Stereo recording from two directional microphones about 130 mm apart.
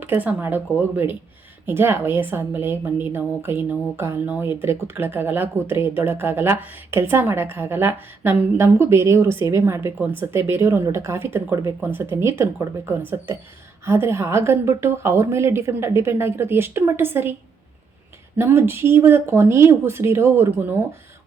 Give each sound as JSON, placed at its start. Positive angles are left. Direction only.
{"t": 0.0, "sound": "a woman's voice", "side_deg": -15}
{"t": 18.3, "sound": "a woman's voice", "side_deg": -15}